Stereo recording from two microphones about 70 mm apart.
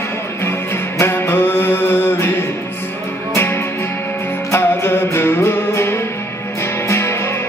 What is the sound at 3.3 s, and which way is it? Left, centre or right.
Music, left.